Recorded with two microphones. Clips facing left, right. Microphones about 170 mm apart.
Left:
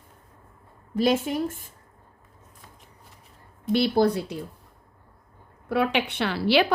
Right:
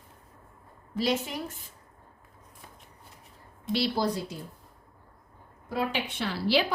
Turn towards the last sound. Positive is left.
turn(degrees=65)  # may be behind; listen again after turning